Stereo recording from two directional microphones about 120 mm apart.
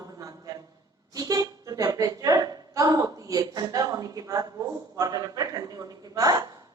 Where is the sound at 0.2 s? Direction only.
30° right (ahead or behind).